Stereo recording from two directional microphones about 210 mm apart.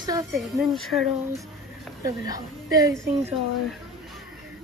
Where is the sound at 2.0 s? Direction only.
15° right (ahead or behind).